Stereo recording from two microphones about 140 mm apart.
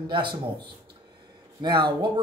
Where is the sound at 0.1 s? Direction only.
35° right (ahead or behind).